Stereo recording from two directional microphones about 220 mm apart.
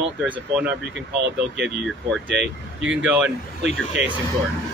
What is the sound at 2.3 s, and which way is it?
Speech, 55° right (ahead or behind).